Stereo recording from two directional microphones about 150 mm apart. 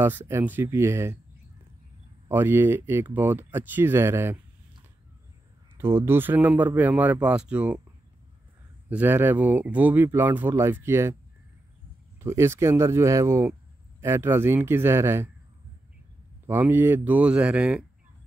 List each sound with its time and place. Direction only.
0.0 s speech: 15° right (ahead or behind)
2.2 s speech: 15° right (ahead or behind)
5.8 s speech: 15° right (ahead or behind)
8.8 s speech: 10° right (ahead or behind)
12.2 s speech: 15° right (ahead or behind)
16.4 s speech: 15° right (ahead or behind)